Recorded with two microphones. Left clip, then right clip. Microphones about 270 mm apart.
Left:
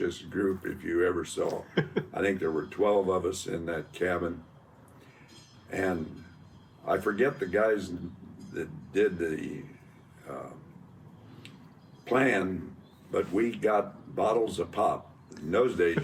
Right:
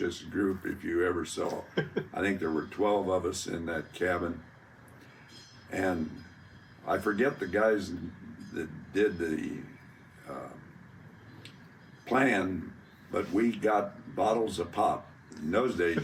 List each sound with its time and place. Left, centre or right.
0.0 s speech: centre
1.5 s speech: left
2.1 s speech: centre
5.7 s a man's voice: centre
12.0 s speech: centre